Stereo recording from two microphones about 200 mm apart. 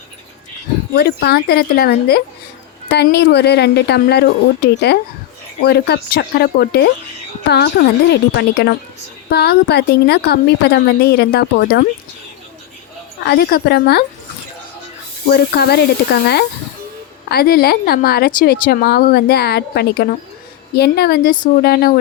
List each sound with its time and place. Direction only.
0.9 s a woman's voice: 55° left (ahead or behind)
13.2 s speech: 50° left (ahead or behind)
15.3 s speech: 55° left (ahead or behind)